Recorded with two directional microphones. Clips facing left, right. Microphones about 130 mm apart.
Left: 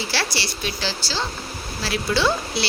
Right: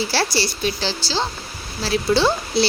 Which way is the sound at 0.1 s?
35° right (ahead or behind).